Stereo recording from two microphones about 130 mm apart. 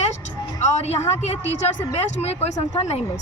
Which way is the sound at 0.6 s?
60° left (ahead or behind).